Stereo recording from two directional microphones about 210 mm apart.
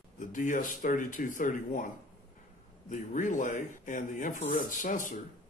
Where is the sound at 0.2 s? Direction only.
35° left (ahead or behind).